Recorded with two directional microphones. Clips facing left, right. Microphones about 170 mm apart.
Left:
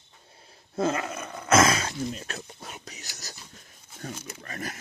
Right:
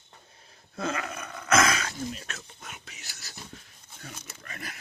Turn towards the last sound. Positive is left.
turn(degrees=40)  # may be behind; listen again after turning